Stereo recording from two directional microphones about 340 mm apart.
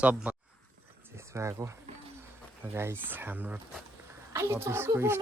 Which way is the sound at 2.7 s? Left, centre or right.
Centre.